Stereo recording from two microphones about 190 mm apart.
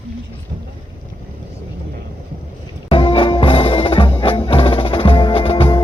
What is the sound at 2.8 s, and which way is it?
Music, 30° left (ahead or behind).